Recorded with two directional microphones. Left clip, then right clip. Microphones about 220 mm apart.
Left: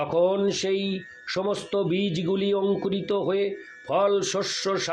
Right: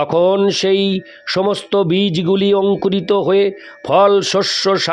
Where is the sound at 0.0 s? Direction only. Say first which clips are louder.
Right 9 dB; 45° right (ahead or behind).